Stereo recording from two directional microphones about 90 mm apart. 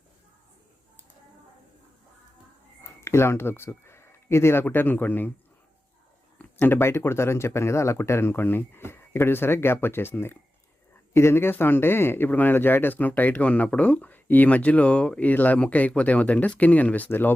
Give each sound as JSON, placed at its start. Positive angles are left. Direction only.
{"t": 3.0, "sound": "speech", "side_deg": 30}
{"t": 6.4, "sound": "speech", "side_deg": 20}